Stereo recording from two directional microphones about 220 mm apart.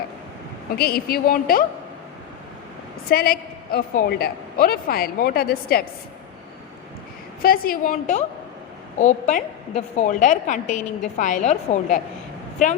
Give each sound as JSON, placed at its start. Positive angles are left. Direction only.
{"t": 0.8, "sound": "a woman's voice", "side_deg": 45}
{"t": 3.1, "sound": "a woman's voice", "side_deg": 45}
{"t": 7.4, "sound": "a woman's voice", "side_deg": 40}